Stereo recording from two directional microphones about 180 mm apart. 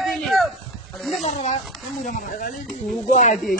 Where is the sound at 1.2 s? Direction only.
40° left (ahead or behind).